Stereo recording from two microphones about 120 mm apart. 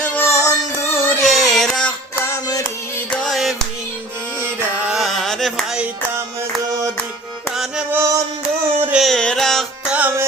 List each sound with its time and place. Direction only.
0.0 s music: 10° left (ahead or behind)
0.3 s music: 25° left (ahead or behind)
0.9 s music: 15° left (ahead or behind)
1.2 s carnatic music: centre (ahead or behind)
2.1 s music: 20° left (ahead or behind)
3.1 s music: 5° left (ahead or behind)
4.4 s music: 20° right (ahead or behind)
4.9 s a sound: centre (ahead or behind)
7.5 s music: 5° right (ahead or behind)
7.9 s music: 25° right (ahead or behind)
8.9 s music: centre (ahead or behind)
9.9 s music: 15° right (ahead or behind)